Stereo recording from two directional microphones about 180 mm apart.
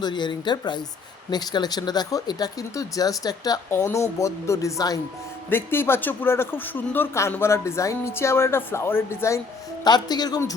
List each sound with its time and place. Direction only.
0.0 s a man's voice: 25° left (ahead or behind)